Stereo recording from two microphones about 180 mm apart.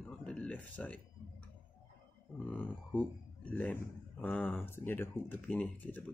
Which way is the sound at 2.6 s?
10° left (ahead or behind).